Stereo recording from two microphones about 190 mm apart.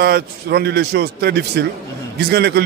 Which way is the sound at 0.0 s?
55° right (ahead or behind).